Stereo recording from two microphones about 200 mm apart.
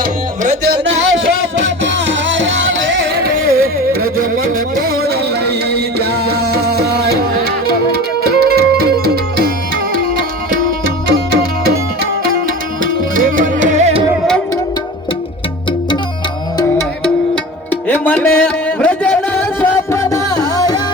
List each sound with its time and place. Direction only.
0.6 s music: 65° right (ahead or behind)
3.4 s music: 45° right (ahead or behind)
13.4 s music: 40° right (ahead or behind)
17.0 s music: 5° left (ahead or behind)